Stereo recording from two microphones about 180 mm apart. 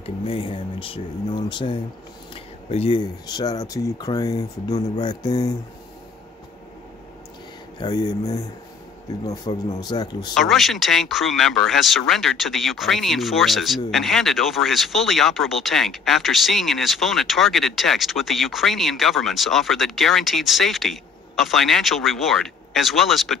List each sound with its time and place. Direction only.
0.0 s speech: 30° left (ahead or behind)
2.3 s a sound: 30° left (ahead or behind)
3.3 s speech: 20° left (ahead or behind)
7.8 s speech: 20° left (ahead or behind)
10.3 s speech: centre (ahead or behind)